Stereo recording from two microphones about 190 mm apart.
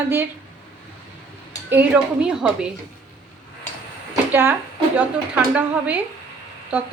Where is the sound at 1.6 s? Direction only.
10° right (ahead or behind).